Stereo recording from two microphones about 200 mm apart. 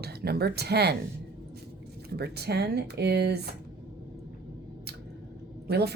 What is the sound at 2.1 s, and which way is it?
Speech, 55° right (ahead or behind).